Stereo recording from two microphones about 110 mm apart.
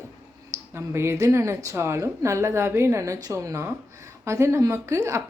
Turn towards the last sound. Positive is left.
turn(degrees=-30)  # may be behind; listen again after turning